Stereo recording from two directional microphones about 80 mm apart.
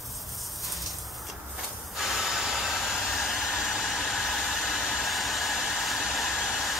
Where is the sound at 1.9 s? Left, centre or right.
Centre.